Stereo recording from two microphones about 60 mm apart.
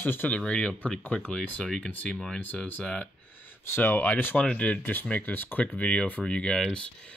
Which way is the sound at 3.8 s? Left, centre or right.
Left.